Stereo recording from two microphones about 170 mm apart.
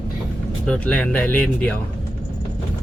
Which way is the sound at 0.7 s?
5° left (ahead or behind).